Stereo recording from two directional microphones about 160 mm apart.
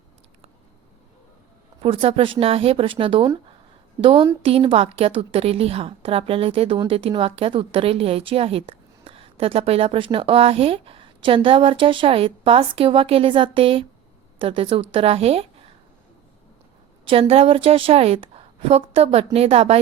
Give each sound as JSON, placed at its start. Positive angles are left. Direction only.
{"t": 1.8, "sound": "a woman's voice", "side_deg": -35}
{"t": 17.1, "sound": "a woman's voice", "side_deg": -35}